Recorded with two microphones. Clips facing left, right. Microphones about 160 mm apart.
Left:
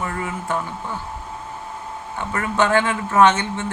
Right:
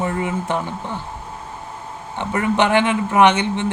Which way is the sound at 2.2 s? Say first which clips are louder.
Right 3 dB; 20° right (ahead or behind).